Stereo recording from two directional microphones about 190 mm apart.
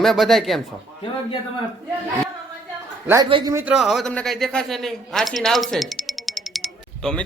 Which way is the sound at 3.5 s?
15° right (ahead or behind).